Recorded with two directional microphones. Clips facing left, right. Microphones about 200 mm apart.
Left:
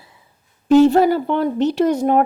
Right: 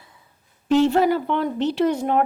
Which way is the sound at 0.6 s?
40° left (ahead or behind).